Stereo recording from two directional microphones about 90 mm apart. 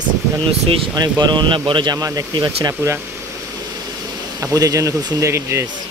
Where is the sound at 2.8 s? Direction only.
30° right (ahead or behind).